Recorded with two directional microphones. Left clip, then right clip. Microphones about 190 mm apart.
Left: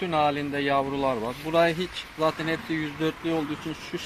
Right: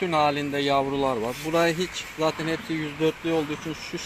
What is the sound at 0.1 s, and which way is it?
Speech, 15° right (ahead or behind).